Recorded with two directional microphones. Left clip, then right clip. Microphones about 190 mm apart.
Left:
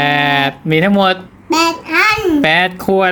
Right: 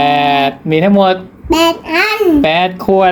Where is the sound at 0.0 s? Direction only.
45° left (ahead or behind).